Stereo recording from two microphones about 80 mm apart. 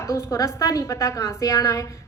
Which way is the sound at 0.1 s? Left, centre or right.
Left.